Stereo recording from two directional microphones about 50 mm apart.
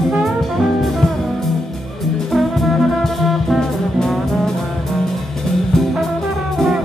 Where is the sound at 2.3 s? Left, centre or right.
Centre.